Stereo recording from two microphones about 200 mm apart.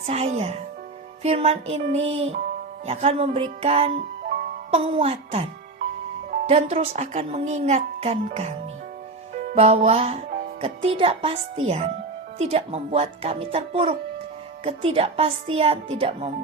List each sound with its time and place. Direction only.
0.0 s a woman's voice: 30° right (ahead or behind)